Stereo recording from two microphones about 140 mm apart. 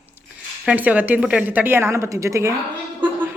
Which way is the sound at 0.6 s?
10° right (ahead or behind).